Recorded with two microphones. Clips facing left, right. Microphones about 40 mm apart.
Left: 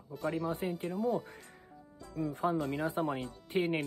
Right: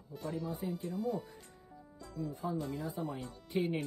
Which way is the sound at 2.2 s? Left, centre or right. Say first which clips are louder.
Left 6 dB; left.